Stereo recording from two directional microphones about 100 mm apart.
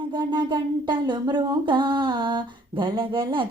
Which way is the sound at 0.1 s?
50° right (ahead or behind).